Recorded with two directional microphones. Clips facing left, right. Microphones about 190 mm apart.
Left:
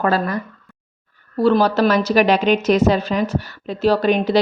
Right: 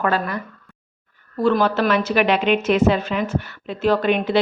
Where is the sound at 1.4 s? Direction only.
35° left (ahead or behind).